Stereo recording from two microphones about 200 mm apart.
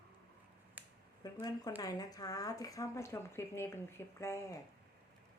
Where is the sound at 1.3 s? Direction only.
20° left (ahead or behind).